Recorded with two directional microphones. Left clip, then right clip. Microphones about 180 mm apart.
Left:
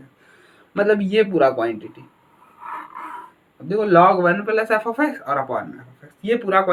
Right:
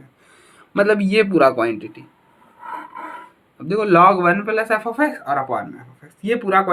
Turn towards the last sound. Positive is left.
turn(degrees=-20)  # may be behind; listen again after turning